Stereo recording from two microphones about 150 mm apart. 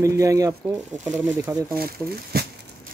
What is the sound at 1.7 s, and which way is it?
Speech, 85° right.